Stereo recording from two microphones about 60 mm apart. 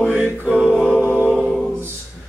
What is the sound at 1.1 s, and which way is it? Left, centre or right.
A capella, left.